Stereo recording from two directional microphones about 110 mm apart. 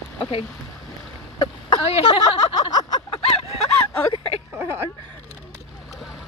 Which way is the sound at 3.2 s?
65° left (ahead or behind).